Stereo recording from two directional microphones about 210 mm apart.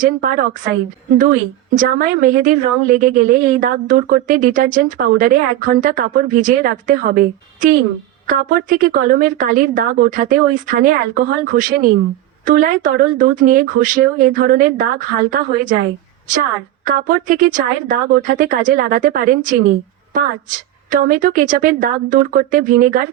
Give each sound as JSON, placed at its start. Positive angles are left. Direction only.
{"t": 0.0, "sound": "a woman's voice", "side_deg": -40}
{"t": 1.7, "sound": "a woman's voice", "side_deg": -40}
{"t": 16.8, "sound": "a woman's voice", "side_deg": -40}